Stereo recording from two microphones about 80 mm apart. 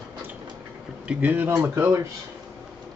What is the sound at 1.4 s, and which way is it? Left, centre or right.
Speech, right.